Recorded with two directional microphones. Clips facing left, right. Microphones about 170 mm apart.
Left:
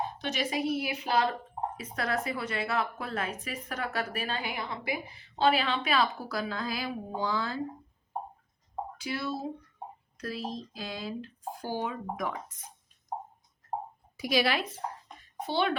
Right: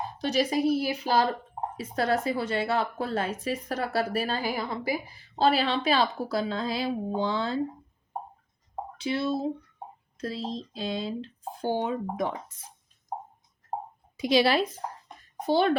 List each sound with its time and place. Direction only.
0.2 s a woman's voice: 35° right (ahead or behind)
8.7 s a sound: 25° right (ahead or behind)
10.2 s speech: 25° right (ahead or behind)
14.2 s speech: 25° right (ahead or behind)
15.4 s a child's voice: 40° right (ahead or behind)